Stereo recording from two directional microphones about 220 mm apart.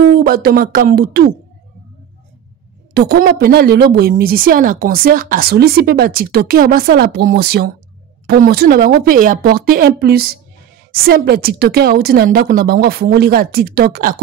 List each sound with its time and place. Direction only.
0.2 s a woman's voice: 45° right (ahead or behind)
2.9 s a woman's voice: 45° right (ahead or behind)